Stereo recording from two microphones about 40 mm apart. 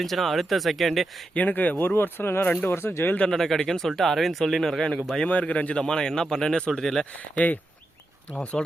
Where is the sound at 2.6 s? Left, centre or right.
Left.